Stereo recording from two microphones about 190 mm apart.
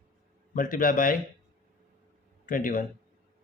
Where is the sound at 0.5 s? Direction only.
45° left (ahead or behind).